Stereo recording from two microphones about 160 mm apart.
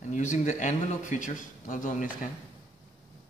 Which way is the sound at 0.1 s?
50° left (ahead or behind).